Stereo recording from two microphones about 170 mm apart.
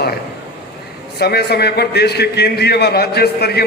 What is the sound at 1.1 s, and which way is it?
A man's voice, 70° left (ahead or behind).